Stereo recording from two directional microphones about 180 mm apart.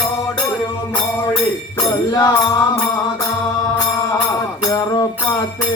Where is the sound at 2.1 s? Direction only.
20° left (ahead or behind).